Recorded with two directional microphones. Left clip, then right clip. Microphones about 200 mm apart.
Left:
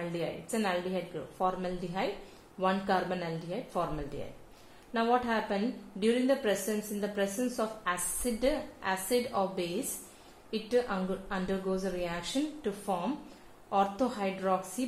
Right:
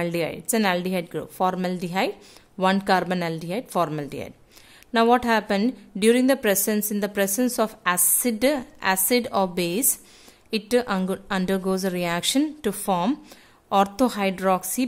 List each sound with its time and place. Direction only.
0.0 s a woman's voice: 45° right (ahead or behind)